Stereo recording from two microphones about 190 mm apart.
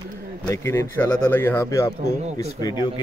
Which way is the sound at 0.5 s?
15° left (ahead or behind).